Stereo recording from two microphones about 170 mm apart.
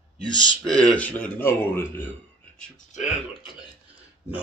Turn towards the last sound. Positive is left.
turn(degrees=45)  # may be behind; listen again after turning